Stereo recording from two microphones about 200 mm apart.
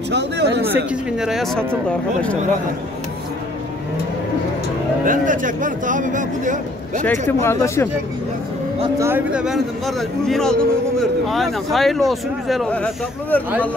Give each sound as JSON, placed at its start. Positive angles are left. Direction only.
{"t": 0.1, "sound": "speech", "side_deg": -60}
{"t": 0.7, "sound": "speech", "side_deg": -5}
{"t": 5.0, "sound": "speech", "side_deg": -40}
{"t": 7.4, "sound": "speech", "side_deg": 15}
{"t": 8.9, "sound": "speech", "side_deg": -10}